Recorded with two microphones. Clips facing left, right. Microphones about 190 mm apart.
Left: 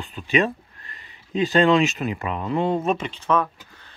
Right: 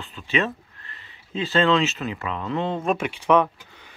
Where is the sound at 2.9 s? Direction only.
10° right (ahead or behind).